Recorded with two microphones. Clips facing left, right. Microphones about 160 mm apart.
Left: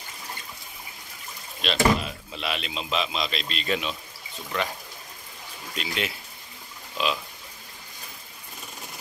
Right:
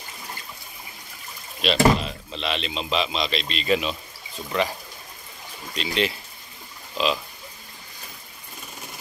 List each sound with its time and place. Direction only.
1.6 s speech: centre (ahead or behind)
5.8 s speech: 5° left (ahead or behind)